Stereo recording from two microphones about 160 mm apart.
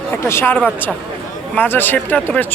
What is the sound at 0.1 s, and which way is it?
Speech, 15° left (ahead or behind).